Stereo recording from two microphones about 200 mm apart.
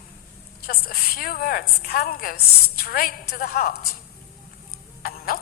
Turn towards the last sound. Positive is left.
turn(degrees=45)  # may be behind; listen again after turning